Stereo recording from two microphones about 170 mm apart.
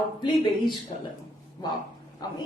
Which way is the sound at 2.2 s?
25° left (ahead or behind).